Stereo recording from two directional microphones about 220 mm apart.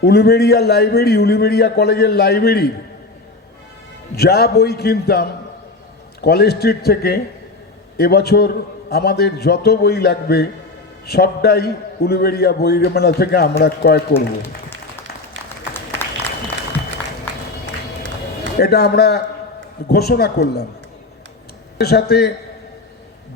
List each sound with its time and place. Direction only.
0.0 s a man's voice: 45° left (ahead or behind)
4.1 s a man's voice: 45° left (ahead or behind)
14.1 s applause: 10° left (ahead or behind)
18.5 s a man's voice: 45° left (ahead or behind)
21.8 s a man's voice: 45° left (ahead or behind)